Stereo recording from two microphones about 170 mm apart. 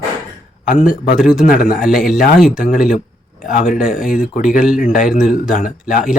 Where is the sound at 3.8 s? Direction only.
55° left (ahead or behind).